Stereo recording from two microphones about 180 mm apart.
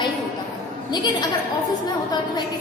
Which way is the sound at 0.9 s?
25° left (ahead or behind).